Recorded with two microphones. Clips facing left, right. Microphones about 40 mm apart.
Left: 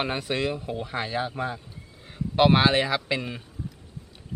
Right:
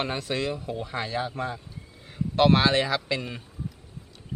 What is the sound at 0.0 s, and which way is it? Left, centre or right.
A man's voice, centre.